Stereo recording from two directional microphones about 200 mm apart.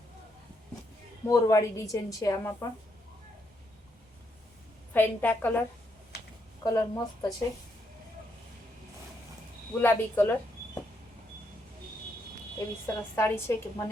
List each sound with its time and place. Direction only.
1.2 s a woman's voice: 15° left (ahead or behind)
4.9 s a woman's voice: 10° left (ahead or behind)
6.7 s speech: 20° left (ahead or behind)
9.7 s a woman's voice: 10° left (ahead or behind)
12.5 s a woman's voice: 15° left (ahead or behind)